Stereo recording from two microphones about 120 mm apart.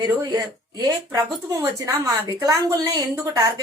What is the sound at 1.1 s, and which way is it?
A woman's voice, 30° right (ahead or behind).